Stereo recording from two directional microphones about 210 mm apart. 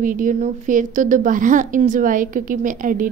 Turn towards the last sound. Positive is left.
turn(degrees=-40)  # may be behind; listen again after turning